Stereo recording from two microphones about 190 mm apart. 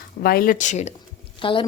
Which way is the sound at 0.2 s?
50° left (ahead or behind).